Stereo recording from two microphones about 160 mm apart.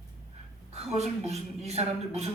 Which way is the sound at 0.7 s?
40° right (ahead or behind).